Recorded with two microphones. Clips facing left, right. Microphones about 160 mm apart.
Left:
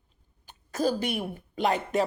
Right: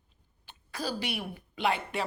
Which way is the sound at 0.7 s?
45° left (ahead or behind).